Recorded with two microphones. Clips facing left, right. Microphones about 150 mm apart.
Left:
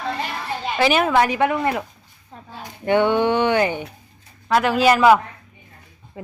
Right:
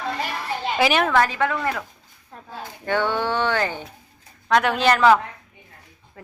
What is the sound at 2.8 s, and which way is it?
Speech, 15° left (ahead or behind).